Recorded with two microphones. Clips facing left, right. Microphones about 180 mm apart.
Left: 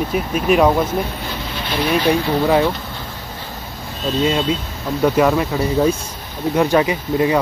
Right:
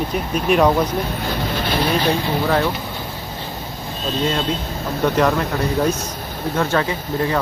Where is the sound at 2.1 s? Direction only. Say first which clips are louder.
Left 3 dB; 15° left (ahead or behind).